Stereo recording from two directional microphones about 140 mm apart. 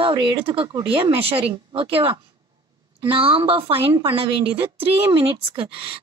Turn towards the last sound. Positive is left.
turn(degrees=-40)  # may be behind; listen again after turning